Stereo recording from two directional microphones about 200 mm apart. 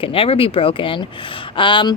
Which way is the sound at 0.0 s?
25° left (ahead or behind).